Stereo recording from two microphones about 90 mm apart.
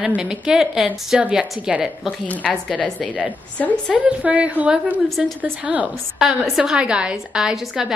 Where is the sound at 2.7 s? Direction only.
15° left (ahead or behind).